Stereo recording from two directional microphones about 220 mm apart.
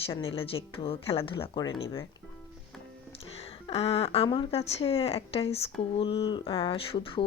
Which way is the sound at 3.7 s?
25° left (ahead or behind).